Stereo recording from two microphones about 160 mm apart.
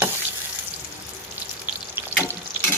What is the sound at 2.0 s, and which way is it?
Water, 15° right (ahead or behind).